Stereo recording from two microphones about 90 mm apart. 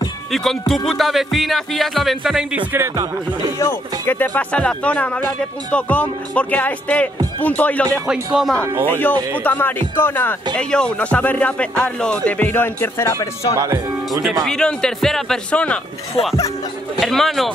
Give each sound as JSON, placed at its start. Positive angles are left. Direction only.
{"t": 0.3, "sound": "music", "side_deg": 5}
{"t": 3.5, "sound": "speech", "side_deg": 35}
{"t": 4.1, "sound": "speech", "side_deg": 20}
{"t": 8.1, "sound": "speech", "side_deg": -10}
{"t": 9.4, "sound": "speech", "side_deg": 20}
{"t": 10.5, "sound": "speech", "side_deg": 10}
{"t": 13.6, "sound": "speech", "side_deg": -40}
{"t": 14.4, "sound": "music", "side_deg": 5}
{"t": 15.5, "sound": "speech", "side_deg": 15}
{"t": 17.0, "sound": "music", "side_deg": 5}